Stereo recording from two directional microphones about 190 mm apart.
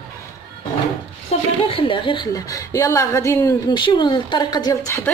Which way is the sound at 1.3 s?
35° left (ahead or behind).